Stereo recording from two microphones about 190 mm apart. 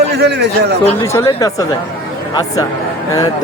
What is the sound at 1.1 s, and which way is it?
Speech, 15° left (ahead or behind).